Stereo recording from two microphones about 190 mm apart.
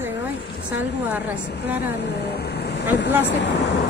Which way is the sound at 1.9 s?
60° left (ahead or behind).